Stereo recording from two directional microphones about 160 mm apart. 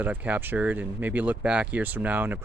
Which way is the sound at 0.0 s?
10° right (ahead or behind).